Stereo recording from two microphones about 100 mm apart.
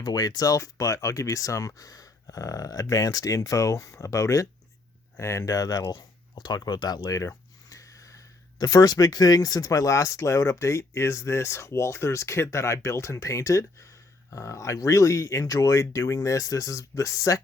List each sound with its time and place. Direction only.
0.0 s speech: 40° left (ahead or behind)